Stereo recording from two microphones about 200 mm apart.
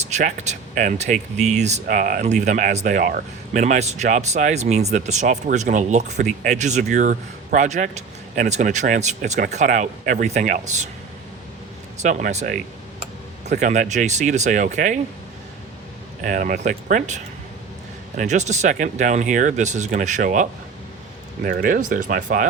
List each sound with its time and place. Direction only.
0.0 s speech: 35° right (ahead or behind)
11.9 s speech: 35° right (ahead or behind)
16.2 s speech: 40° right (ahead or behind)
18.2 s speech: 35° right (ahead or behind)